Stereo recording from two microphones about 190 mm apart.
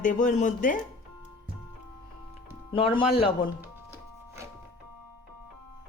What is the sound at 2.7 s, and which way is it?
Speech, 25° left (ahead or behind).